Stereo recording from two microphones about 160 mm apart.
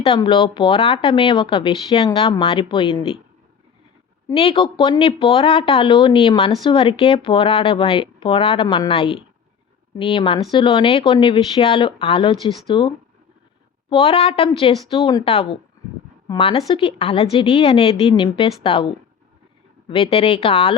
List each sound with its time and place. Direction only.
0.2 s speech: 35° left (ahead or behind)
4.4 s speech: 35° left (ahead or behind)
8.6 s a woman's voice: 25° left (ahead or behind)
8.9 s speech: 35° left (ahead or behind)
13.9 s speech: 40° left (ahead or behind)
19.9 s speech: 35° left (ahead or behind)